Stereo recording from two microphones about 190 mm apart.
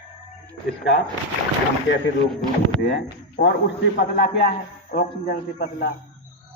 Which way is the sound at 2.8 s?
60° left (ahead or behind).